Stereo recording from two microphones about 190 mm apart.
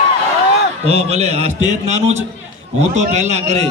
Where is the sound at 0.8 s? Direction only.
35° right (ahead or behind).